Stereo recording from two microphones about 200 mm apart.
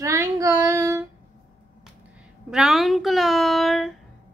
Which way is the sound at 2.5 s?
Centre (ahead or behind).